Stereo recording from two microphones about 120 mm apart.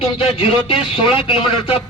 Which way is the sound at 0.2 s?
50° left (ahead or behind).